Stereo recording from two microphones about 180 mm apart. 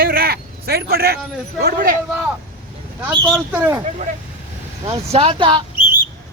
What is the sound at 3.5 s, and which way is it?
Speech, 10° right (ahead or behind).